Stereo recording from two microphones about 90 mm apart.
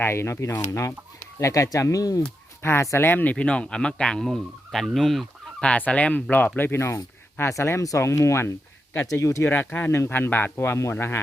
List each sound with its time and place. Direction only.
0.0 s speech: 30° left (ahead or behind)
3.1 s speech: 20° left (ahead or behind); by 5.6 s centre (ahead or behind)
5.6 s speech: 15° left (ahead or behind); by 9.5 s 30° left (ahead or behind)
9.5 s speech: 20° left (ahead or behind)